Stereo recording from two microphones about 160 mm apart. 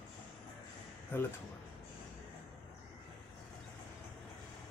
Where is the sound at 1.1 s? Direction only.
15° left (ahead or behind).